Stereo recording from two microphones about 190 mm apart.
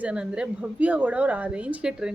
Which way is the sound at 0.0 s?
5° right (ahead or behind).